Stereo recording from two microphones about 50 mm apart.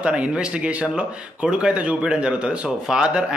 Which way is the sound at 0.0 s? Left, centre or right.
Right.